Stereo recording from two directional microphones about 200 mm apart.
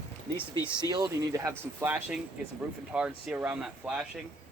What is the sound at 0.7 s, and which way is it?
Speech, 20° right (ahead or behind).